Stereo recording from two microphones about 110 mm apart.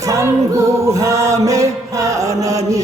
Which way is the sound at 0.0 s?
25° right (ahead or behind).